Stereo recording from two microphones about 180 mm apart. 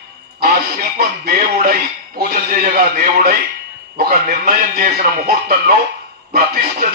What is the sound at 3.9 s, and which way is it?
Music, 55° right (ahead or behind).